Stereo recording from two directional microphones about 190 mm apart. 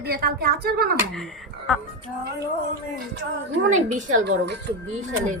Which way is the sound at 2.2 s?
60° right (ahead or behind).